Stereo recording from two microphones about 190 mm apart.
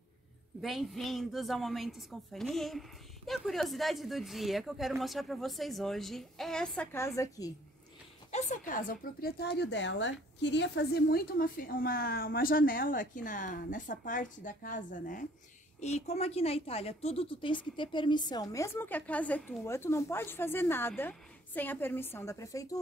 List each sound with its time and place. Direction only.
0.6 s a woman's voice: centre (ahead or behind); by 7.5 s 20° left (ahead or behind)
8.3 s a woman's voice: 40° left (ahead or behind); by 22.8 s 15° left (ahead or behind)